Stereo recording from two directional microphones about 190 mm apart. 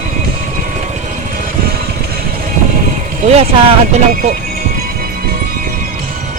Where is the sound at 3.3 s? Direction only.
30° right (ahead or behind).